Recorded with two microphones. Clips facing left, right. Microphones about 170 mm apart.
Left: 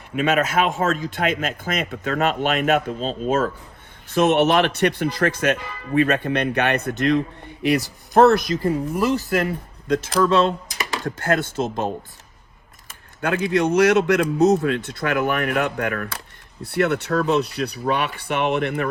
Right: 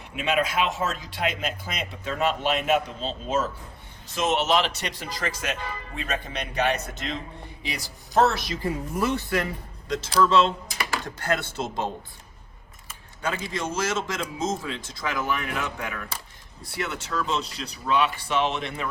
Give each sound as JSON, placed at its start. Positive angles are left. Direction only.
{"t": 0.2, "sound": "speech", "side_deg": 50}
{"t": 9.9, "sound": "speech", "side_deg": 50}
{"t": 13.2, "sound": "speech", "side_deg": 60}